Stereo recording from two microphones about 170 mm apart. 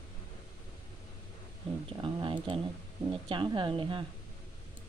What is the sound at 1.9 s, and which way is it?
A woman's voice, 30° right (ahead or behind).